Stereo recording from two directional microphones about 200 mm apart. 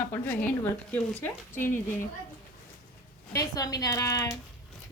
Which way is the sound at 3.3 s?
15° left (ahead or behind).